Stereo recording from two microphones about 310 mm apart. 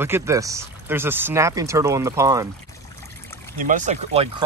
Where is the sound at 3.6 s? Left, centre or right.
Right.